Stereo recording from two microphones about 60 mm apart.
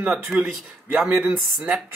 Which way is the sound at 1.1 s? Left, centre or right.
Right.